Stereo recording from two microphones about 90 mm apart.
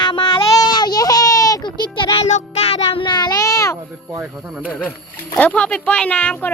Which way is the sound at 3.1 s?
50° left (ahead or behind).